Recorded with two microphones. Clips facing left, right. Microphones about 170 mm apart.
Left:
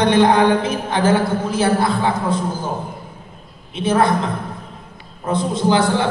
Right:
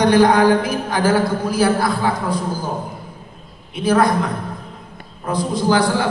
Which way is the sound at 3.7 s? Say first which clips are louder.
Right 1 dB; 25° left (ahead or behind).